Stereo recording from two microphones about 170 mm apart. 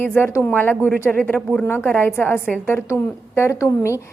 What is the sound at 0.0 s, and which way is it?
A woman's voice, 15° left (ahead or behind).